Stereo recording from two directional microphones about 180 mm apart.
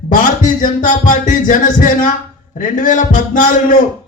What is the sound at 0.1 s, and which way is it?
A man's voice, 45° left (ahead or behind).